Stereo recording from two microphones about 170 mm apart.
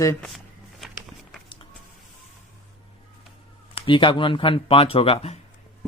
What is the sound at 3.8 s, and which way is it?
Speech, 30° left (ahead or behind).